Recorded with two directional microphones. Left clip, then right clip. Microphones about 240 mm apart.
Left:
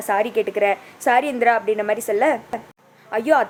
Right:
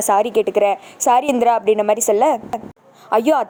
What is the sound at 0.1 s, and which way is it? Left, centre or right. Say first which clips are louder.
A woman's voice: right 4 dB; right.